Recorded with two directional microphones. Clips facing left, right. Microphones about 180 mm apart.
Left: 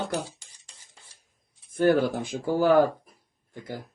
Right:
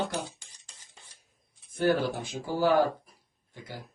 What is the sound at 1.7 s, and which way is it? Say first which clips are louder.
Speech: left 5 dB; 50° left (ahead or behind).